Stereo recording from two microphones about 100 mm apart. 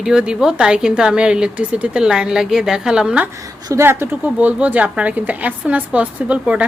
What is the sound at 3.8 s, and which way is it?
Speech, 25° right (ahead or behind).